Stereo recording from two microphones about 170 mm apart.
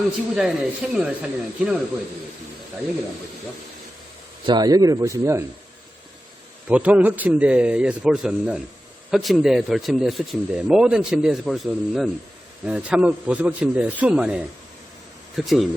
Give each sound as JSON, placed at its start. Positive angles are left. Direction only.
{"t": 0.3, "sound": "speech", "side_deg": -5}
{"t": 4.4, "sound": "speech", "side_deg": -25}
{"t": 6.7, "sound": "a man's voice", "side_deg": -10}